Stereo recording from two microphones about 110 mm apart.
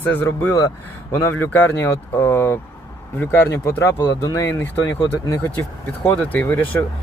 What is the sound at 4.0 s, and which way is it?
Speech, 45° left (ahead or behind).